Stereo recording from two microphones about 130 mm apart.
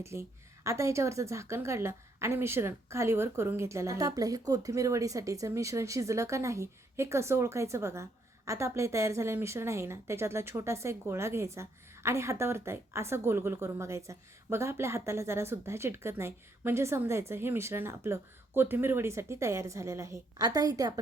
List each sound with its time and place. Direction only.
0.0 s a woman's voice: 20° right (ahead or behind)